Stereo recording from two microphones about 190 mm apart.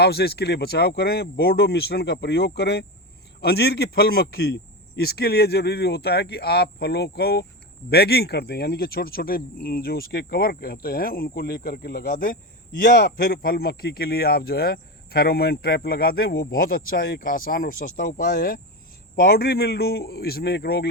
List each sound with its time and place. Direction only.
0.0 s a man's voice: 55° left (ahead or behind)
12.8 s a man's voice: 60° left (ahead or behind)